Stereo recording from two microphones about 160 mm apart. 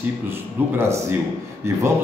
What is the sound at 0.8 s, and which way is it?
Speech, 15° right (ahead or behind).